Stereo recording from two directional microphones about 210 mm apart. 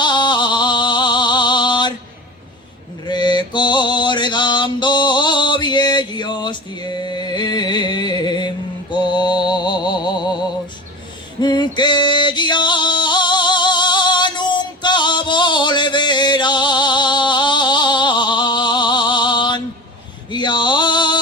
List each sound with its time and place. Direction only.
0.0 s music: 20° left (ahead or behind)
3.1 s mantra: 20° left (ahead or behind)
11.3 s music: 20° left (ahead or behind)